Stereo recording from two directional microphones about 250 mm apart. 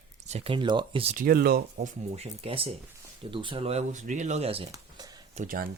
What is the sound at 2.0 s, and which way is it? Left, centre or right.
Speech, right.